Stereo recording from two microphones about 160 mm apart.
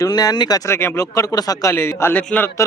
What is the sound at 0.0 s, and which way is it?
Speech, 25° left (ahead or behind).